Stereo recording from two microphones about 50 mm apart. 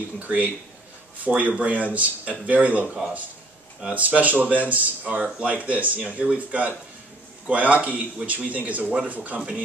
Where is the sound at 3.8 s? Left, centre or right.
Right.